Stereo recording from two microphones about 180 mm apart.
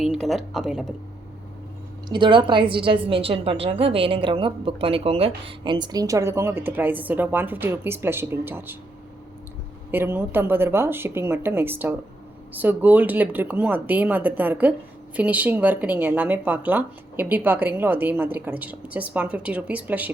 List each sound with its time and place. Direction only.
0.0 s speech: centre (ahead or behind)
2.0 s a woman's voice: 25° right (ahead or behind)
9.9 s a woman's voice: 10° right (ahead or behind)